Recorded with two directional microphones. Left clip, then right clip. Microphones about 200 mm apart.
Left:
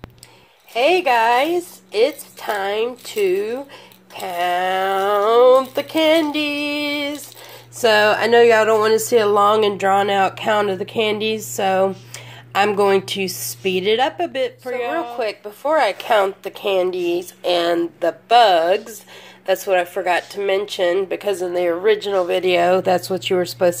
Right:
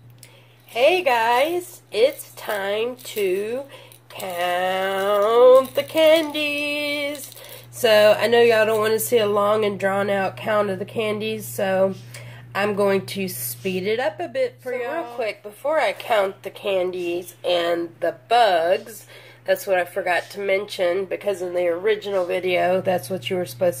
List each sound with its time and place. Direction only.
0.7 s speech: 30° left (ahead or behind)
15.1 s speech: 45° left (ahead or behind)